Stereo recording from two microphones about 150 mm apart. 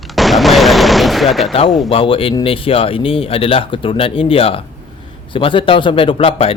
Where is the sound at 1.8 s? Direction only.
35° left (ahead or behind).